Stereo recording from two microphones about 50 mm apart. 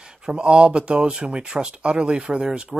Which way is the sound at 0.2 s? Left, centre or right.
Centre.